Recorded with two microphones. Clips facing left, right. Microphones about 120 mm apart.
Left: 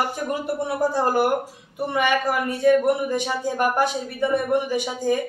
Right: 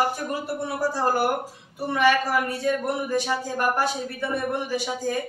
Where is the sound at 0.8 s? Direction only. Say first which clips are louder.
Left 2 dB; 20° left (ahead or behind).